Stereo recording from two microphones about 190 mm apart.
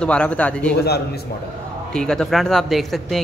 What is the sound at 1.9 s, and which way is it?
Speech, 5° left (ahead or behind).